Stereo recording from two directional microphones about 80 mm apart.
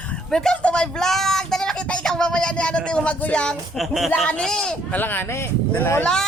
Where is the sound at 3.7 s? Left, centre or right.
Centre.